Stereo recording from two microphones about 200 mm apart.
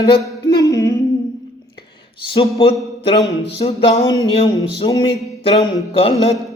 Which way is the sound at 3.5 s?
30° left (ahead or behind).